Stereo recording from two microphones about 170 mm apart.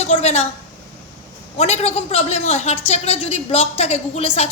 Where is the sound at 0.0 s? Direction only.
40° left (ahead or behind).